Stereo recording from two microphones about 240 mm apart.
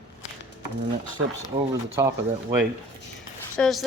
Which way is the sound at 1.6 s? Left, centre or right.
Centre.